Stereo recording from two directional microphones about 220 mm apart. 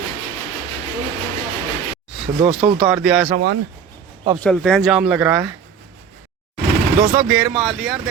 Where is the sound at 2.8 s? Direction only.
5° right (ahead or behind).